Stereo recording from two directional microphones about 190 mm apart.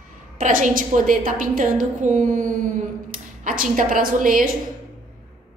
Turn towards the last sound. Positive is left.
turn(degrees=-45)  # may be behind; listen again after turning